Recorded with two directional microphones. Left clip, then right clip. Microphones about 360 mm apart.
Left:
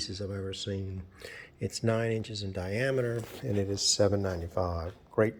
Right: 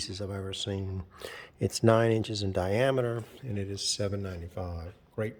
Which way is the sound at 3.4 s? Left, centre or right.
Centre.